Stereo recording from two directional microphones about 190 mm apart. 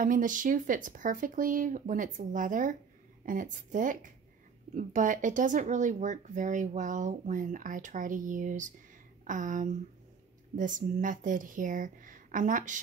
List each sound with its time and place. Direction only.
0.0 s speech: 45° right (ahead or behind)